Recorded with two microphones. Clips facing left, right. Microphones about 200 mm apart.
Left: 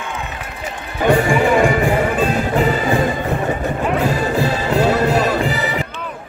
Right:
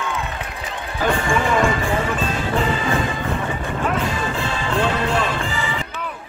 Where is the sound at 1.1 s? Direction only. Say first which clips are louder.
Left 7 dB; 40° left (ahead or behind).